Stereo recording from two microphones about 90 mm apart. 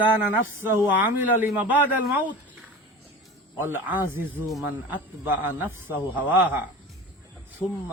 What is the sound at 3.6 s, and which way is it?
Speech, 25° right (ahead or behind).